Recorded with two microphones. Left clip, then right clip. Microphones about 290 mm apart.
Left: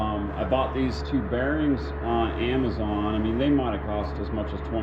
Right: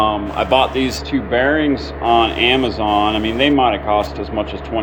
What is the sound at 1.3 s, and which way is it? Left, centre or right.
Speech, right.